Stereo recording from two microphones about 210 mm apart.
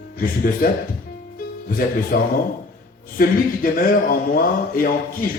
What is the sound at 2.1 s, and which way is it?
Speech, 45° left (ahead or behind).